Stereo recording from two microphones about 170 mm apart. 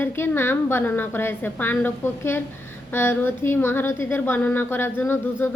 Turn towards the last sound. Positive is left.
turn(degrees=15)  # may be behind; listen again after turning